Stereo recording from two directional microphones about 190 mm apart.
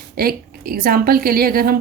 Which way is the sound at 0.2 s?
50° right (ahead or behind).